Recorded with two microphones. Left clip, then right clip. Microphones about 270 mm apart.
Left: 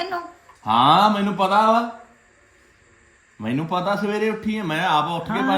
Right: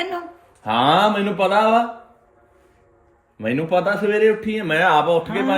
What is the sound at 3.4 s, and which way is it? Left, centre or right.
A man's voice, centre.